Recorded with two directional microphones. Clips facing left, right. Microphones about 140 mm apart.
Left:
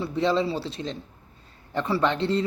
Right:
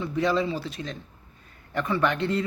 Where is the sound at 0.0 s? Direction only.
30° left (ahead or behind).